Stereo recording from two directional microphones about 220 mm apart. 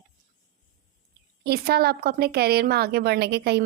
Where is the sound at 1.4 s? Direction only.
45° right (ahead or behind).